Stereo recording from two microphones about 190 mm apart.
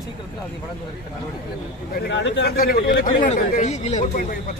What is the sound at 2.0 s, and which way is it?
Speech, 70° left (ahead or behind).